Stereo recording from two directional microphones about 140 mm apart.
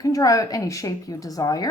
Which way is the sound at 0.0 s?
25° left (ahead or behind).